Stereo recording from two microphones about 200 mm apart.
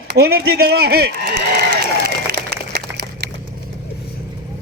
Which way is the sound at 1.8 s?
50° right (ahead or behind).